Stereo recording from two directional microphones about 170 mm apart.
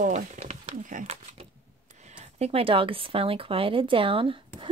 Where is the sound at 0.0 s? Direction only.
45° right (ahead or behind).